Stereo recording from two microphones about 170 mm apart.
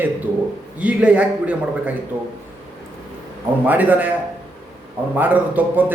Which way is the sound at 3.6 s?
10° right (ahead or behind).